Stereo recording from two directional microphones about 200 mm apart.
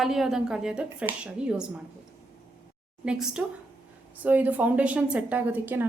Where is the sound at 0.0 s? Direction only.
Centre (ahead or behind).